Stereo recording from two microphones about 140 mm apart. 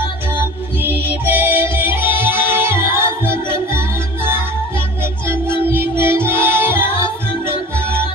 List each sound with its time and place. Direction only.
0.3 s music: 15° right (ahead or behind)